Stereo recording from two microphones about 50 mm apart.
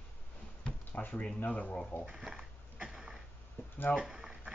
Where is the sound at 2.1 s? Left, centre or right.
Centre.